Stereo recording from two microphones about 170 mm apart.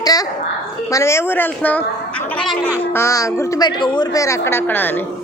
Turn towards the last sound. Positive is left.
turn(degrees=10)  # may be behind; listen again after turning